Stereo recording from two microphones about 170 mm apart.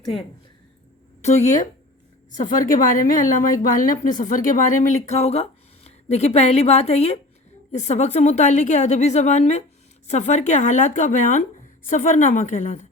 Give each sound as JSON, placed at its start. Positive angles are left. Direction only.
{"t": 1.2, "sound": "speech", "side_deg": 45}